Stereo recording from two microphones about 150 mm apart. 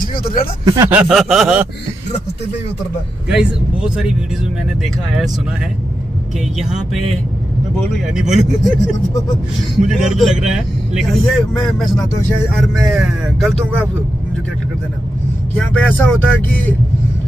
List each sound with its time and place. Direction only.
0.2 s speech: 75° left (ahead or behind)
0.8 s speech: 5° right (ahead or behind)
3.3 s speech: 5° right (ahead or behind)
8.1 s speech: 5° right (ahead or behind)
15.5 s speech: 10° left (ahead or behind)